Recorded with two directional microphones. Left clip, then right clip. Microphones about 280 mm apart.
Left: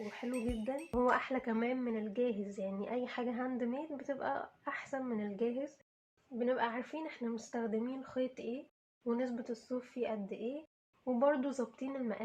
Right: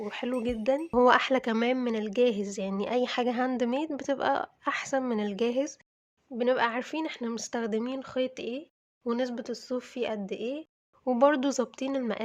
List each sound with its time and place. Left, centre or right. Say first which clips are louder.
0.0 s speech: right 9 dB; right